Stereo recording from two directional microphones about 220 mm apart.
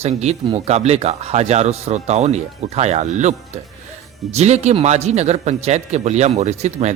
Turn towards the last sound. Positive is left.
turn(degrees=-30)  # may be behind; listen again after turning